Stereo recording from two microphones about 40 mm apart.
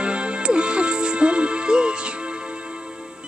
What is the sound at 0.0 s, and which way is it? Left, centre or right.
Music, right.